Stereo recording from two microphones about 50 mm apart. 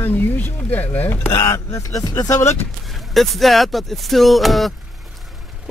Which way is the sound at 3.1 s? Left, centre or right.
Centre.